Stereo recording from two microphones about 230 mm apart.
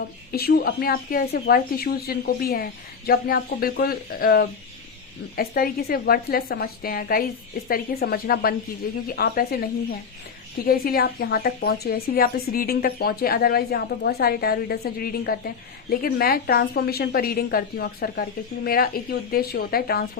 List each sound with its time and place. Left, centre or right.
0.3 s speech: left
10.7 s speech: left